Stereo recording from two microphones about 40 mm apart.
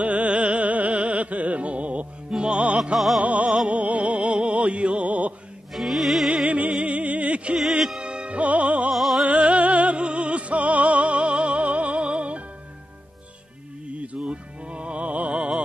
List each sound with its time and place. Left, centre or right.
0.0 s music: right
5.7 s music: centre
6.4 s music: right
8.9 s music: centre
9.2 s music: right
14.2 s music: right
15.0 s music: right